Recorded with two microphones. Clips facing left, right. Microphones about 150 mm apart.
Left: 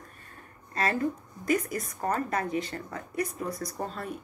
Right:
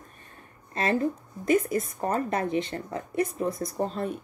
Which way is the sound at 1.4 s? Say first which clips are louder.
Right 5 dB; 25° right (ahead or behind).